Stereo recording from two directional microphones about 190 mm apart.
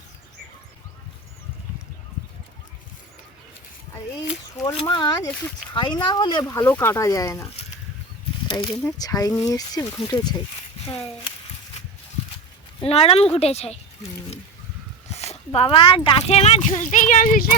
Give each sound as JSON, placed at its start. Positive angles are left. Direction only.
{"t": 4.7, "sound": "speech", "side_deg": 25}
{"t": 8.4, "sound": "speech", "side_deg": 25}
{"t": 12.8, "sound": "speech", "side_deg": 30}
{"t": 15.1, "sound": "speech", "side_deg": 35}